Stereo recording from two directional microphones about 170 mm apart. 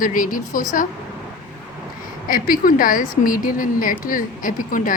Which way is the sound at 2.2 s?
55° left (ahead or behind).